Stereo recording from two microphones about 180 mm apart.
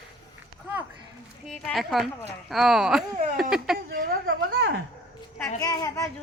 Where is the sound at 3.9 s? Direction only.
55° right (ahead or behind).